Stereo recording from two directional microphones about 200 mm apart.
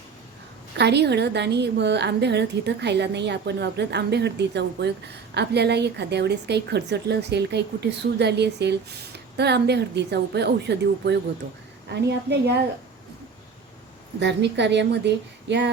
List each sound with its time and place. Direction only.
0.8 s a woman's voice: 55° right (ahead or behind)
14.2 s a woman's voice: 60° right (ahead or behind)